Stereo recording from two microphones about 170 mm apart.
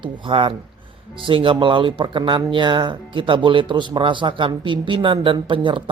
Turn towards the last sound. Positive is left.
turn(degrees=-30)  # may be behind; listen again after turning